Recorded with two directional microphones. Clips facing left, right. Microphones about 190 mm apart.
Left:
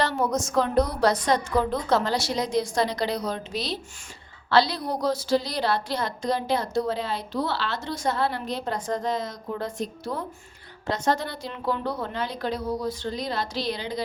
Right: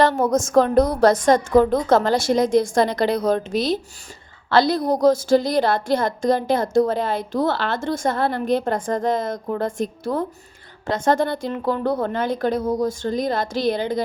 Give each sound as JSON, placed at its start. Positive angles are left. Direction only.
{"t": 0.0, "sound": "a woman's voice", "side_deg": -50}